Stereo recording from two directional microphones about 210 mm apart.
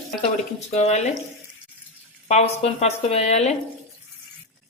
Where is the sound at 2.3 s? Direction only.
30° left (ahead or behind).